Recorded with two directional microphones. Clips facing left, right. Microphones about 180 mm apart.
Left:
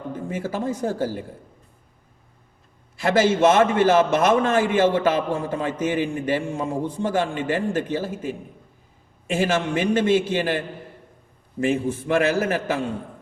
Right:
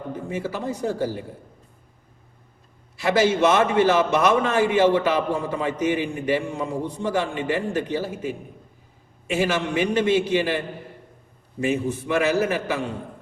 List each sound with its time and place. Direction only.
0.3 s a man's voice: 50° left (ahead or behind)
3.0 s a man's voice: 50° left (ahead or behind)
9.3 s a man's voice: 50° left (ahead or behind)
11.7 s a man's voice: 50° left (ahead or behind)